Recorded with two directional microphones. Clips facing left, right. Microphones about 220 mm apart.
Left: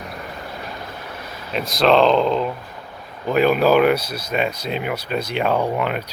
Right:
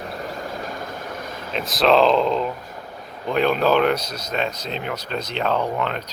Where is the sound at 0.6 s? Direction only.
45° right (ahead or behind).